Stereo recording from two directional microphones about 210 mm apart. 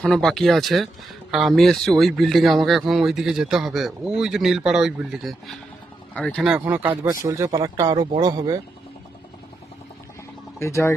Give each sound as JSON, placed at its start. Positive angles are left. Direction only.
{"t": 0.0, "sound": "speech", "side_deg": 0}
{"t": 10.6, "sound": "speech", "side_deg": 15}